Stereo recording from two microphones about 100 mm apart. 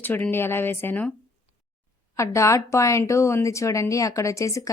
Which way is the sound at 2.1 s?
30° left (ahead or behind).